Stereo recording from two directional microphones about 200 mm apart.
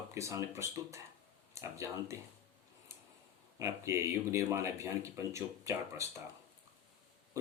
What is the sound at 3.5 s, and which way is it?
Speech, 15° right (ahead or behind).